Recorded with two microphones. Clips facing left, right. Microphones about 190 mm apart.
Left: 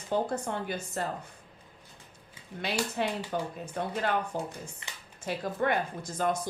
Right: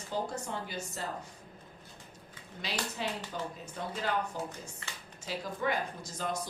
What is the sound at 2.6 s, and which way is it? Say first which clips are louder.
A woman's voice: left 6 dB; 55° left (ahead or behind).